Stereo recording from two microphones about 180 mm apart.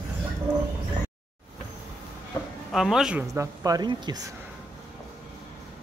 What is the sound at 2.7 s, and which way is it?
Speech, centre (ahead or behind).